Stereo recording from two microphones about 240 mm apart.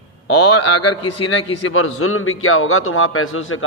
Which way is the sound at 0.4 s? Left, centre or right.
Left.